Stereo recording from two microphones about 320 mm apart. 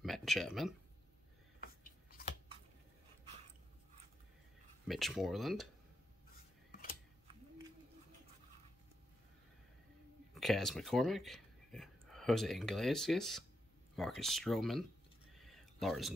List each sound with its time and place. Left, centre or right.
0.0 s speech: centre
2.0 s chewing: left
4.8 s speech: centre
10.3 s speech: centre
15.3 s a sound: centre